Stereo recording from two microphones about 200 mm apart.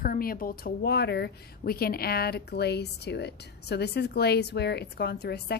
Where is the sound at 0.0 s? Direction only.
45° left (ahead or behind).